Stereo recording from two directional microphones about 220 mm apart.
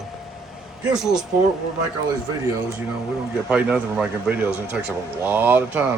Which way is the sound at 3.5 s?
5° right (ahead or behind).